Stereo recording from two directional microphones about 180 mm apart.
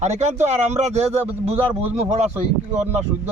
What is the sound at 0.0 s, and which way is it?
Speech, 40° right (ahead or behind).